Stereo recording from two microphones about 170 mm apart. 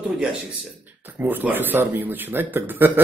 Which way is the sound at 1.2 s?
10° right (ahead or behind).